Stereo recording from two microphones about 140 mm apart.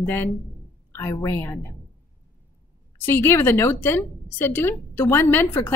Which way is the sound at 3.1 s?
15° left (ahead or behind).